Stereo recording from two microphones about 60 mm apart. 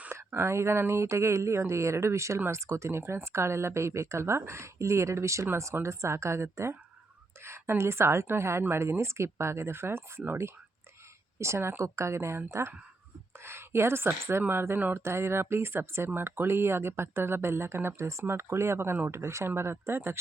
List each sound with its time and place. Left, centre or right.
0.1 s a woman's voice: right